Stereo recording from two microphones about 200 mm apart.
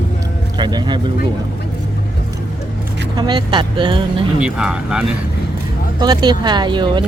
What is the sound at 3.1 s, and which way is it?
Speech, 20° right (ahead or behind).